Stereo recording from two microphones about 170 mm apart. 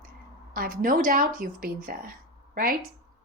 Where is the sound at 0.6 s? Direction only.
55° right (ahead or behind).